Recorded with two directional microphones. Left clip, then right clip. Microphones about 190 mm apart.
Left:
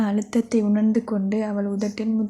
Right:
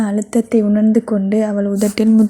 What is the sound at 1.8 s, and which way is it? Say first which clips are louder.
Speech: right 12 dB; 40° right (ahead or behind).